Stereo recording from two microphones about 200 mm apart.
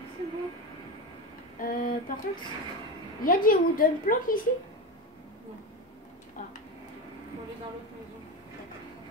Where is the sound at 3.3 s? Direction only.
45° left (ahead or behind).